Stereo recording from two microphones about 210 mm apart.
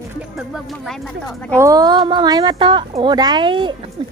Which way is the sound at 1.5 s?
15° right (ahead or behind).